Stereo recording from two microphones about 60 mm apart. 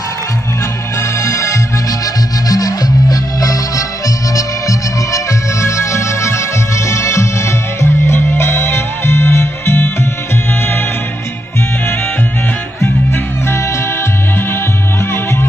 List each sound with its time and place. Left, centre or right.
1.2 s music: left
2.4 s music: left
4.4 s music: left
7.8 s music: left
12.8 s music: left